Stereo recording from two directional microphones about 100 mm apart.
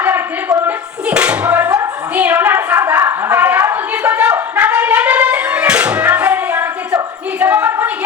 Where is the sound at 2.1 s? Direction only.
15° right (ahead or behind).